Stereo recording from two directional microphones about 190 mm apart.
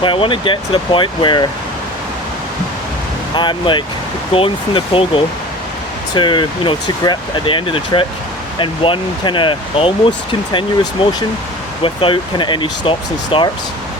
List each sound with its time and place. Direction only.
0.0 s speech: 25° left (ahead or behind)
3.3 s speech: 25° left (ahead or behind)